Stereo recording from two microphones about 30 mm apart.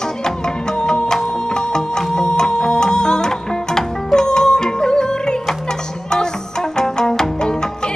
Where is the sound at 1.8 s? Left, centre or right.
Centre.